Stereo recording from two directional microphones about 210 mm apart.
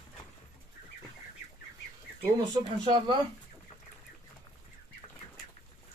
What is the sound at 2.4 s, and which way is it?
Speech, 20° right (ahead or behind).